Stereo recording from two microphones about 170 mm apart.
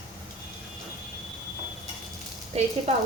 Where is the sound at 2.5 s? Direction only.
40° right (ahead or behind).